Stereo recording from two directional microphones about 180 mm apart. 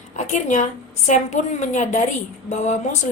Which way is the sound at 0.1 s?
40° left (ahead or behind).